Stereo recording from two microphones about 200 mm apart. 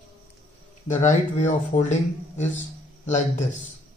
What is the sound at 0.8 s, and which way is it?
A man's voice, 35° left (ahead or behind).